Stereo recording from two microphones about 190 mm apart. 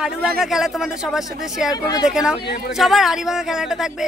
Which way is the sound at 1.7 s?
20° left (ahead or behind).